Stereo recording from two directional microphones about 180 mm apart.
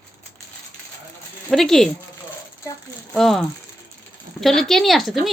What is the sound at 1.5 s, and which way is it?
Speech, centre (ahead or behind).